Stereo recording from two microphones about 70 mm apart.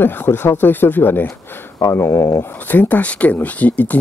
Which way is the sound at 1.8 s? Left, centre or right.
Left.